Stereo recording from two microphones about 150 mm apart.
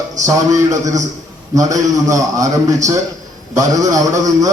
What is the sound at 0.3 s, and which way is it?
A man's voice, 20° right (ahead or behind).